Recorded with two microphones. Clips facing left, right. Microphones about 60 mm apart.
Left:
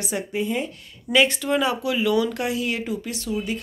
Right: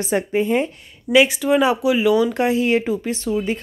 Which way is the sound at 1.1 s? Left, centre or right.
Centre.